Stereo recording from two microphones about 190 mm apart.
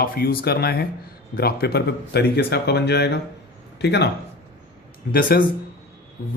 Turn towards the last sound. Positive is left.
turn(degrees=50)  # may be behind; listen again after turning